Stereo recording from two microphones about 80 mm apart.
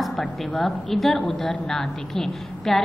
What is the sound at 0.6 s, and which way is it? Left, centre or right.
A woman's voice, centre.